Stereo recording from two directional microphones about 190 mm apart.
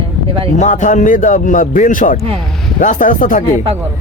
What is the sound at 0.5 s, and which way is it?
Speech, 40° left (ahead or behind).